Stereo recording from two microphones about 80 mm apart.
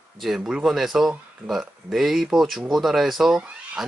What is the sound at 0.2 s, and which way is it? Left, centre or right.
Speech, centre.